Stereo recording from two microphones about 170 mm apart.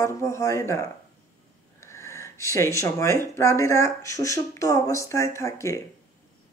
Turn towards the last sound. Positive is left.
turn(degrees=20)  # may be behind; listen again after turning